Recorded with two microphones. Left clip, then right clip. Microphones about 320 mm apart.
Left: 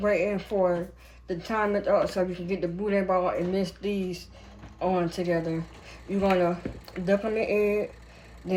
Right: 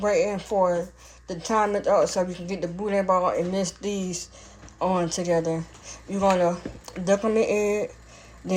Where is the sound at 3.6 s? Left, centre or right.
Right.